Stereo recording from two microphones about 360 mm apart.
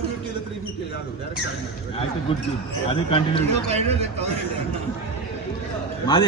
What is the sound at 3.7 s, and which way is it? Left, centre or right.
Speech, centre.